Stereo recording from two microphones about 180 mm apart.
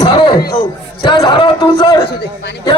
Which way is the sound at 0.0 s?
25° left (ahead or behind).